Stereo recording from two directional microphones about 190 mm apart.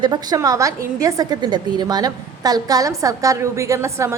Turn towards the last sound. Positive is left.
turn(degrees=-15)  # may be behind; listen again after turning